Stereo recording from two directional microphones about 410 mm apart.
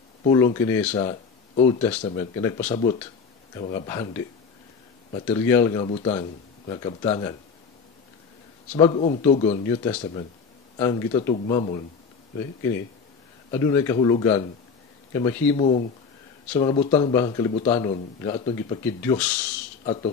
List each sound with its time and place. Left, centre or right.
0.2 s speech: centre
8.7 s speech: centre
13.5 s speech: centre